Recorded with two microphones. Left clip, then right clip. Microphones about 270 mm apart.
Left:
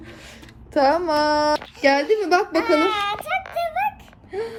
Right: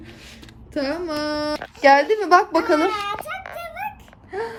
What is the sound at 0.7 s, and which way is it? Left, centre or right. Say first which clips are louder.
A woman's voice: left 7 dB; centre.